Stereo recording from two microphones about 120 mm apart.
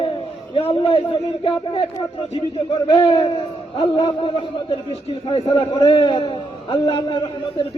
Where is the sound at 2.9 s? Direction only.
40° left (ahead or behind).